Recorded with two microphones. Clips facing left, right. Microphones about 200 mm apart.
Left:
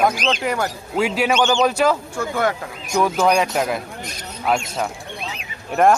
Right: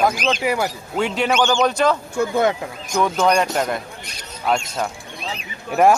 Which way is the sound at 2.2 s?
20° right (ahead or behind).